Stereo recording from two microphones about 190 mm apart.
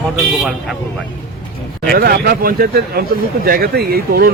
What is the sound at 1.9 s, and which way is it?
Speech, 50° right (ahead or behind).